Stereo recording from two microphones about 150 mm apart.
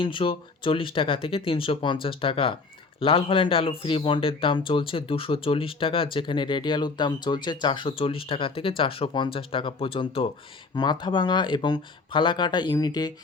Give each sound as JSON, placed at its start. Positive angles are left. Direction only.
{"t": 0.0, "sound": "speech", "side_deg": 35}